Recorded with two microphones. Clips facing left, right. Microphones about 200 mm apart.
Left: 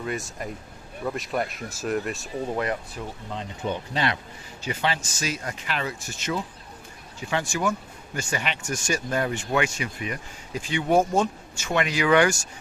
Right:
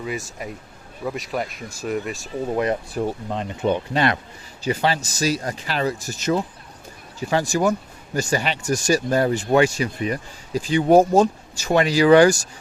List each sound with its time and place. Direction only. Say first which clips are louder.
0.0 s speech: right 1 dB; centre (ahead or behind)
2.9 s speech: right 9 dB; 55° right (ahead or behind)
4.6 s speech: right 6 dB; 40° right (ahead or behind)